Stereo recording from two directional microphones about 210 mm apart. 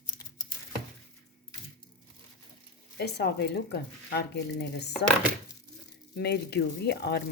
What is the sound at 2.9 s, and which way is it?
Speech, 50° left (ahead or behind).